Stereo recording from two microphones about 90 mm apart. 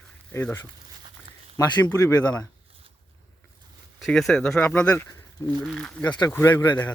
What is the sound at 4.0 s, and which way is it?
Speech, 5° left (ahead or behind).